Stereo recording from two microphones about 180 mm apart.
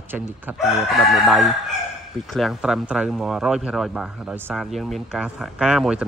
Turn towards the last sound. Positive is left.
turn(degrees=-5)  # may be behind; listen again after turning